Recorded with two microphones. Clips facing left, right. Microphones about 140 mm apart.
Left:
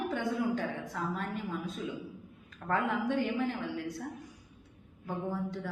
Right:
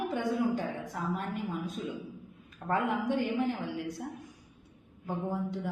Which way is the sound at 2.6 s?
15° right (ahead or behind).